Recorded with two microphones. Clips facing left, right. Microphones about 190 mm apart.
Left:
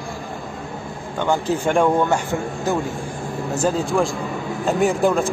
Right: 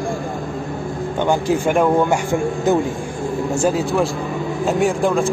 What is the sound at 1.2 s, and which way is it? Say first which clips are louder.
Speech: right 2 dB; 15° right (ahead or behind).